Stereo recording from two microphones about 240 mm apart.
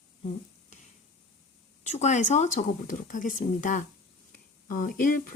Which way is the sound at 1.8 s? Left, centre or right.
Left.